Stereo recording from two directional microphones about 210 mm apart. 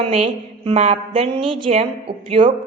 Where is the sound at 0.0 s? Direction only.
30° right (ahead or behind).